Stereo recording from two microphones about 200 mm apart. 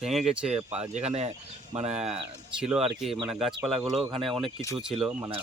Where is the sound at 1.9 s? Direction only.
5° right (ahead or behind).